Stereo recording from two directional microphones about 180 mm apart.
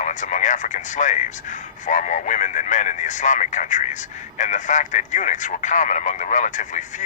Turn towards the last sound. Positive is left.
turn(degrees=45)  # may be behind; listen again after turning